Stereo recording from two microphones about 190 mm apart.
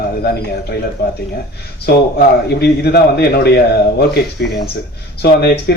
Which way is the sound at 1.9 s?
60° left (ahead or behind).